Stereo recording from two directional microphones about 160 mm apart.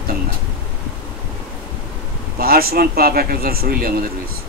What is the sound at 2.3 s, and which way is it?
Speech, 70° right (ahead or behind).